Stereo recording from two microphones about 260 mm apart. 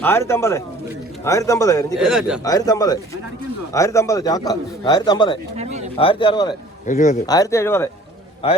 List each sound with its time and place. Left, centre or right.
0.0 s speech: centre
2.0 s a man's voice: centre
2.4 s speech: centre
5.5 s speech: right
6.0 s speech: centre
6.8 s a man's voice: left
7.3 s speech: centre